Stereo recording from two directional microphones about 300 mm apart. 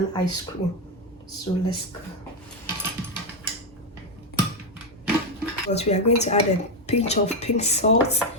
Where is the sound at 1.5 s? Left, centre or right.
Centre.